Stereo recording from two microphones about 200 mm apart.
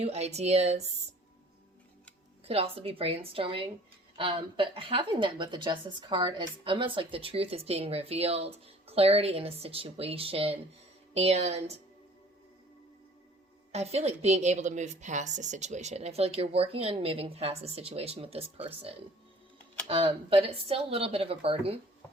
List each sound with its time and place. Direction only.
0.0 s a woman's voice: 30° right (ahead or behind)
2.5 s a woman's voice: 30° right (ahead or behind)
13.7 s a woman's voice: 30° right (ahead or behind)